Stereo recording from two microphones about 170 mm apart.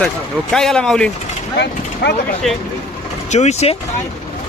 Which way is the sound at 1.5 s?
80° left.